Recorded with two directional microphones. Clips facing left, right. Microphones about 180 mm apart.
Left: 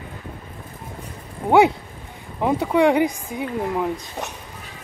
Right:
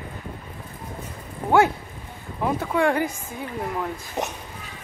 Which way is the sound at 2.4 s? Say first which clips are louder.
Left 5 dB; 15° left (ahead or behind).